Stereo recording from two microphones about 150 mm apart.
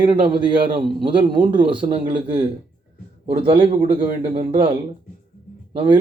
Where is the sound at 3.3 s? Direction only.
35° right (ahead or behind).